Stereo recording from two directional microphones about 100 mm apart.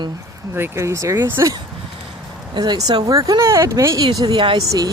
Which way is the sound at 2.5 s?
45° right (ahead or behind).